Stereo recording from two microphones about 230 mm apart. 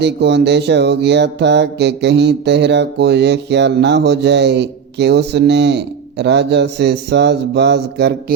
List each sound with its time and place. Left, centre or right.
0.0 s mantra: right